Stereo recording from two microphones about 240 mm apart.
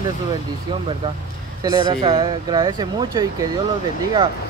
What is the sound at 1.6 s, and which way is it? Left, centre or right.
Speech, centre.